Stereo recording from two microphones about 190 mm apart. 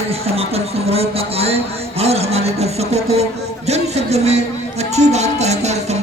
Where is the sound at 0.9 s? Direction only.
30° right (ahead or behind).